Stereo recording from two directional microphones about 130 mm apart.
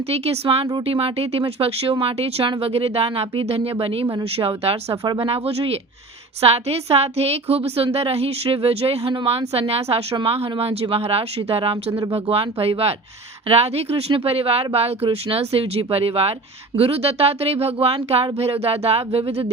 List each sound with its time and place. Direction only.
0.1 s a woman's voice: 50° right (ahead or behind)
4.0 s speech: 25° right (ahead or behind)
4.4 s a woman's voice: 50° right (ahead or behind)